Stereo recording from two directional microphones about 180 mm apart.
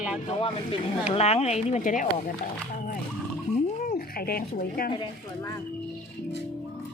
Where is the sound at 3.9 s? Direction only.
55° left (ahead or behind).